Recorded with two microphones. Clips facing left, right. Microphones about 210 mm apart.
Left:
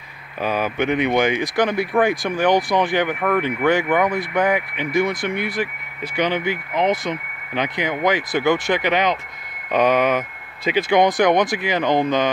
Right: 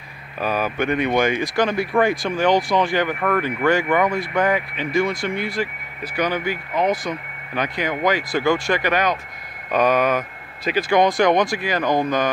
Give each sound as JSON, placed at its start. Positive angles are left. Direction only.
{"t": 0.4, "sound": "speech", "side_deg": 20}